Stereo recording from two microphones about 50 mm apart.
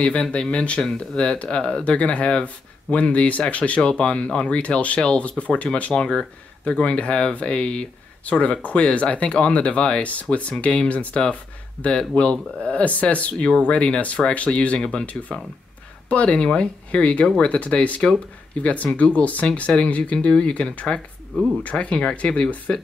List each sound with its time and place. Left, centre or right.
0.0 s speech: left
21.6 s speech: left